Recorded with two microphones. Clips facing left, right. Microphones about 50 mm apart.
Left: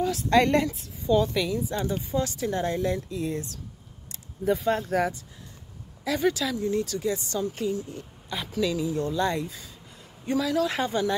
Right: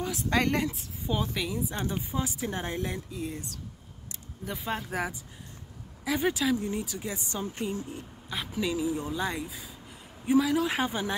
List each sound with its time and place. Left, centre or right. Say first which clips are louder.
0.0 s speech: left 6 dB; centre
4.1 s speech: left 12 dB; centre; by 8.0 s right
8.3 s a woman's voice: left 2 dB; centre
8.5 s speech: left 3 dB; centre